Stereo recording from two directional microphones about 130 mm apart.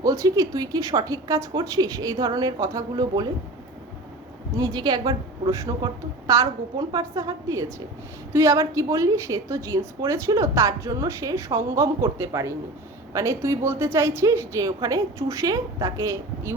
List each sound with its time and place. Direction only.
0.0 s a woman's voice: 25° right (ahead or behind)
4.5 s a woman's voice: 30° right (ahead or behind)